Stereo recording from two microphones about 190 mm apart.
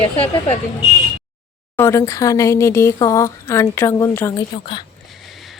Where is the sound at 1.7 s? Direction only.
15° left (ahead or behind).